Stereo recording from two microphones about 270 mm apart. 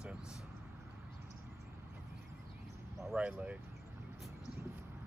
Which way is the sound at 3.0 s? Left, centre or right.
Centre.